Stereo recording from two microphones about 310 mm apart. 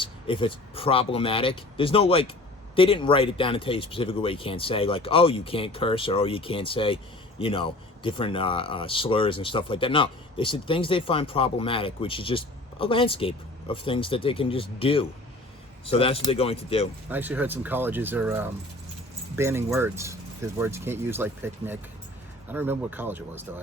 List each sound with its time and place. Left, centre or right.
0.0 s speech: centre
17.1 s speech: centre